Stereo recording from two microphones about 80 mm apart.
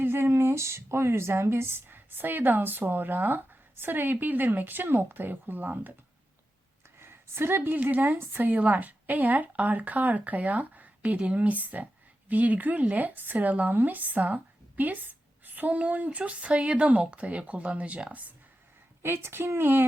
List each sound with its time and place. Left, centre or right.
0.0 s speech: right
7.0 s a woman's voice: right
19.0 s a woman's voice: right